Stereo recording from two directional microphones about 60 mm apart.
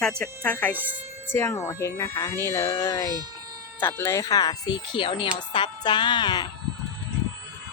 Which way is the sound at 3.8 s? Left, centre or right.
Left.